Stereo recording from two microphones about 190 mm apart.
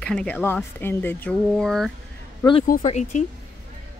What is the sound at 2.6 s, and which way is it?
Speech, 40° left (ahead or behind).